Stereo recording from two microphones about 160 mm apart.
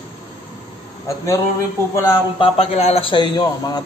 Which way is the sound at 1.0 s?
20° left (ahead or behind).